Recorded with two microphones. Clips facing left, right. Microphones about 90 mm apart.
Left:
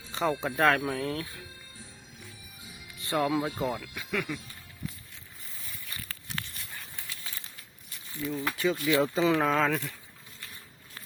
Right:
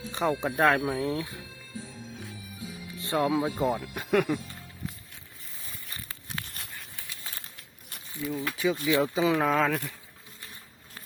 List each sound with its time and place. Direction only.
0.1 s speech: 15° right (ahead or behind)
3.1 s speech: 15° right (ahead or behind)
3.9 s speech: 55° right (ahead or behind)
5.9 s a sound: 20° right (ahead or behind)
8.2 s speech: 10° right (ahead or behind)
9.0 s speech: 5° right (ahead or behind)